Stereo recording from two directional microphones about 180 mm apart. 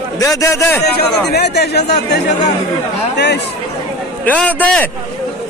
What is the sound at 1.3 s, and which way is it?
A man's voice, 65° left (ahead or behind).